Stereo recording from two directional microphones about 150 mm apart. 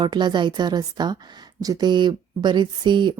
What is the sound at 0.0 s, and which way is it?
A woman's voice, 30° right (ahead or behind).